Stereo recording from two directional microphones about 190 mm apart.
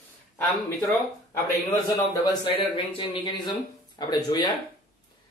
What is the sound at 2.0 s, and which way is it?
Speech, 25° left (ahead or behind).